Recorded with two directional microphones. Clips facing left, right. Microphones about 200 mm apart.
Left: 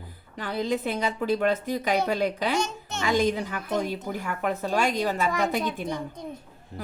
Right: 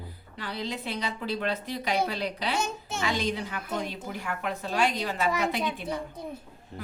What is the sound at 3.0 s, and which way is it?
A woman's voice, 45° left (ahead or behind).